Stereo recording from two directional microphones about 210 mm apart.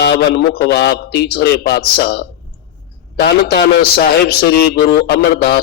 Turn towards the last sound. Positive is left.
turn(degrees=50)  # may be behind; listen again after turning